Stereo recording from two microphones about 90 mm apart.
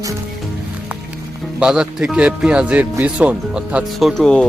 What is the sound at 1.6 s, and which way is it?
Speech, 10° right (ahead or behind).